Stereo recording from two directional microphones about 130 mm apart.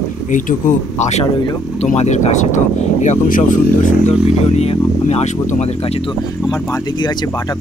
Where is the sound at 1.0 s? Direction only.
60° left (ahead or behind).